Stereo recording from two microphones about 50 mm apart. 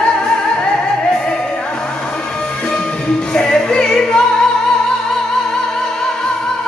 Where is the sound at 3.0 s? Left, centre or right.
Centre.